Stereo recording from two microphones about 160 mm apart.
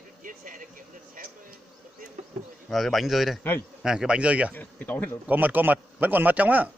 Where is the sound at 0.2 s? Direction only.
55° right (ahead or behind).